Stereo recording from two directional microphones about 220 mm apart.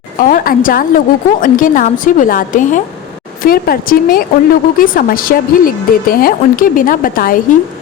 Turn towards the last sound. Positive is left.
turn(degrees=40)  # may be behind; listen again after turning